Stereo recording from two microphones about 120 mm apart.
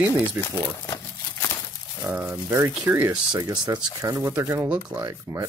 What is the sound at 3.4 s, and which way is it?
Speech, 30° right (ahead or behind).